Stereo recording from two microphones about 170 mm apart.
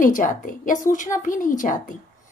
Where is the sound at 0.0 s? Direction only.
50° left (ahead or behind).